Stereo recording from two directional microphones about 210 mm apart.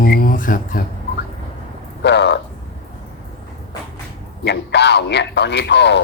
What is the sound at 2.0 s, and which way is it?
Speech, 55° left (ahead or behind).